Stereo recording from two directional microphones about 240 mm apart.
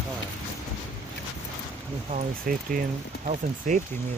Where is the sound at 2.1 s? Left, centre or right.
Right.